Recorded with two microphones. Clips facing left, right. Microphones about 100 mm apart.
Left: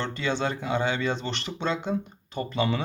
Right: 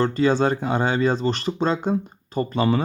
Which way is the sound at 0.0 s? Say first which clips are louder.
Right 9 dB; 40° right (ahead or behind).